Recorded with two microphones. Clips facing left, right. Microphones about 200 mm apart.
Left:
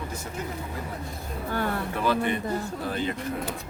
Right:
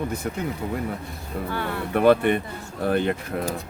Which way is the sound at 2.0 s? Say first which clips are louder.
Right 9 dB; 60° right (ahead or behind).